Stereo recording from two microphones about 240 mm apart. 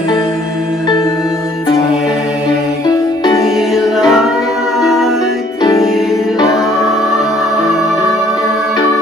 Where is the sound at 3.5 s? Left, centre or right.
Centre.